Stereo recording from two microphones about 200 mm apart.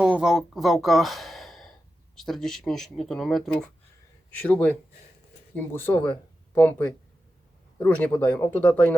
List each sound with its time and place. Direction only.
0.0 s speech: 5° right (ahead or behind)